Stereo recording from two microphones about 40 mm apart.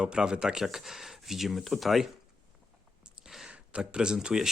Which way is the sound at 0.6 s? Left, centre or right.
Centre.